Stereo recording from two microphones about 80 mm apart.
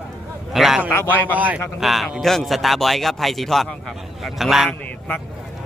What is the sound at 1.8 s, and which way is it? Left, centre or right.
A man's voice, centre.